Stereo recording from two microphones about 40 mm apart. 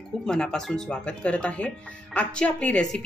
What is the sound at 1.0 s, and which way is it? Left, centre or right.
Speech, left.